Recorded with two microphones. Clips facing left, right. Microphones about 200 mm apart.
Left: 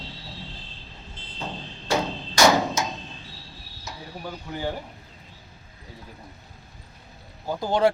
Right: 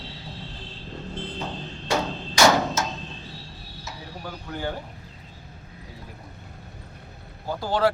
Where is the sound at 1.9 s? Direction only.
10° left (ahead or behind).